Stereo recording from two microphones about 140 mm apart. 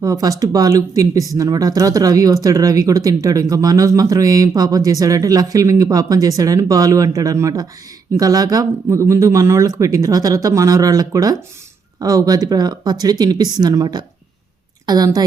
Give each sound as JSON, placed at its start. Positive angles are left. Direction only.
{"t": 0.0, "sound": "speech", "side_deg": -25}